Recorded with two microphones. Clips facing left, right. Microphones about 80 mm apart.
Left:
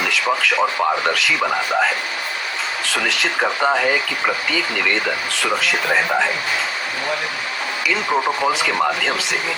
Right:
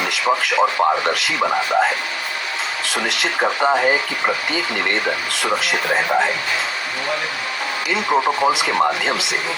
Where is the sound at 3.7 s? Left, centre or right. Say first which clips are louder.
Right 1 dB; right.